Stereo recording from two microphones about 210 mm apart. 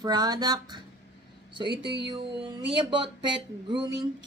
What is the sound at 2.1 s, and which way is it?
Speech, 20° right (ahead or behind).